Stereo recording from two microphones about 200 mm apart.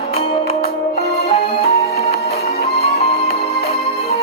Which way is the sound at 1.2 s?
30° left (ahead or behind).